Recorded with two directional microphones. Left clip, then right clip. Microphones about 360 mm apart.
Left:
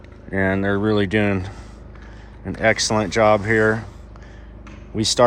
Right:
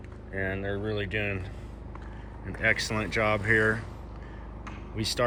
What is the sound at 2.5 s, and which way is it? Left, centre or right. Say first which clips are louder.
Speech: left 9 dB; centre.